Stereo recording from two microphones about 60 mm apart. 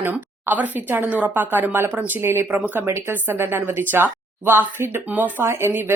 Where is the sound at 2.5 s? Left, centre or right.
Right.